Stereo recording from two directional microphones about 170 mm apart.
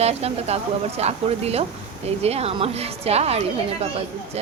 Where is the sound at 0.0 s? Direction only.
40° right (ahead or behind).